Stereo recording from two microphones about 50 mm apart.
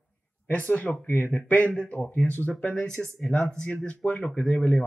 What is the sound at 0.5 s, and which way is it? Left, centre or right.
Speech, left.